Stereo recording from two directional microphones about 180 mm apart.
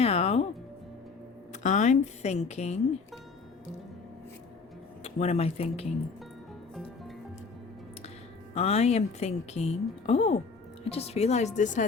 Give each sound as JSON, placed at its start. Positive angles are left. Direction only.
{"t": 0.0, "sound": "music", "side_deg": 35}
{"t": 1.6, "sound": "a woman's voice", "side_deg": 40}
{"t": 5.0, "sound": "a woman's voice", "side_deg": 40}
{"t": 8.5, "sound": "a woman's voice", "side_deg": 35}